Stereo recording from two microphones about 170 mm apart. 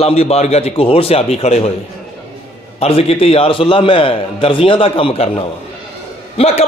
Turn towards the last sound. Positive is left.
turn(degrees=35)  # may be behind; listen again after turning